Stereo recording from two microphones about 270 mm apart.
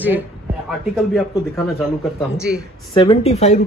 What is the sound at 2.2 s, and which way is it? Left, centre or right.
Speech, centre.